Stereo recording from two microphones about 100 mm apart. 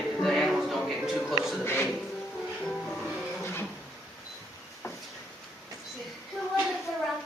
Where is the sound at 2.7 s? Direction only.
5° left (ahead or behind).